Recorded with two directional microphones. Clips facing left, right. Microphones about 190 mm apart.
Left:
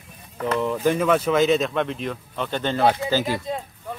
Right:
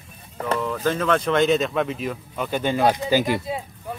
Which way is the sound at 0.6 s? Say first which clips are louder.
Left 4 dB; 15° left (ahead or behind).